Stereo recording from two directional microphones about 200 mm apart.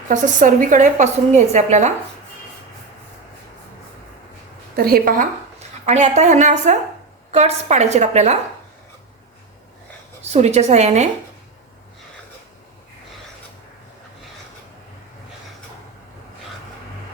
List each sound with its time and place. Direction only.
0.1 s a woman's voice: 40° right (ahead or behind)
4.8 s a woman's voice: 50° right (ahead or behind)
10.3 s a woman's voice: 35° right (ahead or behind)